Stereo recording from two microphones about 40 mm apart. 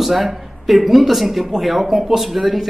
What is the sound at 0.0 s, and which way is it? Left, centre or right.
Speech, centre.